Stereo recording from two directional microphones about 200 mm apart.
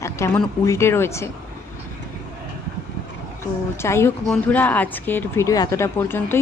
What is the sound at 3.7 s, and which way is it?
Speech, 15° left (ahead or behind).